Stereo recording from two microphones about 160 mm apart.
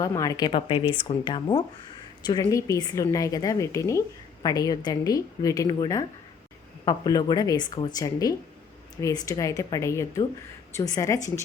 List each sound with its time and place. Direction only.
0.0 s a woman's voice: 20° left (ahead or behind)